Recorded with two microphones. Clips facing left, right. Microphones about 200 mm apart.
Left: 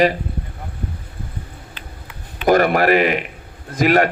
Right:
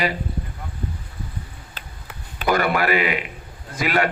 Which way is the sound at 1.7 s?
40° right (ahead or behind).